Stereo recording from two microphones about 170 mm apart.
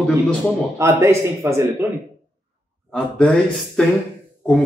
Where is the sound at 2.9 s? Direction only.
5° left (ahead or behind).